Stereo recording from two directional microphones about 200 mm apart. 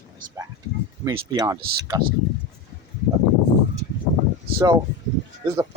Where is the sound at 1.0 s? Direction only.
20° right (ahead or behind).